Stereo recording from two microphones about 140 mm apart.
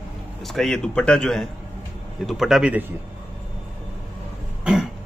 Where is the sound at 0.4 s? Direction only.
Centre (ahead or behind).